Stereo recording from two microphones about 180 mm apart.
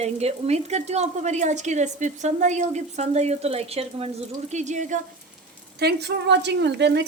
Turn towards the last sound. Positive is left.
turn(degrees=-75)  # may be behind; listen again after turning